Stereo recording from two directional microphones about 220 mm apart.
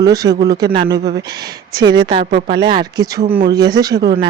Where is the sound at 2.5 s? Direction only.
20° right (ahead or behind).